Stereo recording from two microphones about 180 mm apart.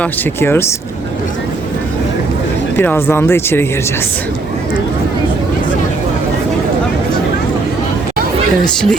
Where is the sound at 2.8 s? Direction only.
10° left (ahead or behind).